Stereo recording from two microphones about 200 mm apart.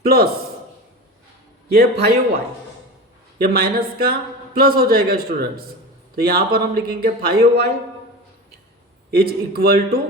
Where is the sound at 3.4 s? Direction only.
50° right (ahead or behind).